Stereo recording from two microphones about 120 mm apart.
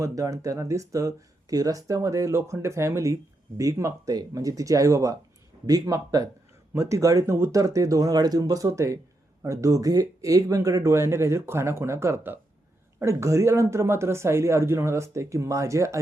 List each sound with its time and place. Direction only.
0.0 s speech: 25° right (ahead or behind)